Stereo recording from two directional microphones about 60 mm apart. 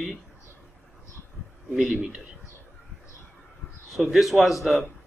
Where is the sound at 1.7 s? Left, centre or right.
Centre.